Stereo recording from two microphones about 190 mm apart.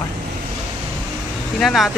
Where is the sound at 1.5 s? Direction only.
Centre (ahead or behind).